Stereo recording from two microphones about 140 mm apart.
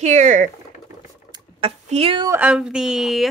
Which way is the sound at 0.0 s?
60° right (ahead or behind).